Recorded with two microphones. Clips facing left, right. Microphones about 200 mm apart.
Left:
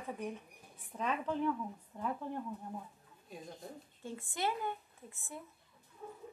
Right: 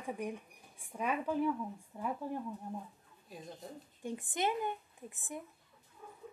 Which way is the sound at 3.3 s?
Centre (ahead or behind).